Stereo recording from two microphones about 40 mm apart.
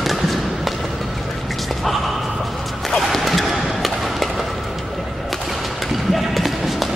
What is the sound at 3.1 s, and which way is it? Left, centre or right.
Music, centre.